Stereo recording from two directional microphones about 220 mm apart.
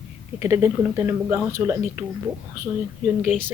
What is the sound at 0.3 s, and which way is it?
Speech, 10° right (ahead or behind).